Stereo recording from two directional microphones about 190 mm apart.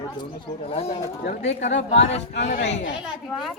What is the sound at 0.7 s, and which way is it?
Speech, 35° left (ahead or behind).